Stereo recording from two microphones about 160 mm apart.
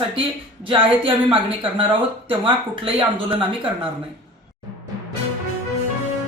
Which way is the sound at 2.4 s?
35° right (ahead or behind).